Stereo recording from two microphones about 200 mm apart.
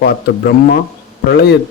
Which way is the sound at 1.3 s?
55° left (ahead or behind).